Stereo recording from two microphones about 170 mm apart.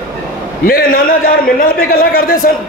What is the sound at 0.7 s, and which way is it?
A man's voice, 60° left (ahead or behind).